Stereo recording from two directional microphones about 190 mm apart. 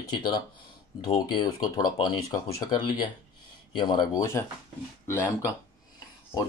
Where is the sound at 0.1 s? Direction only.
25° left (ahead or behind).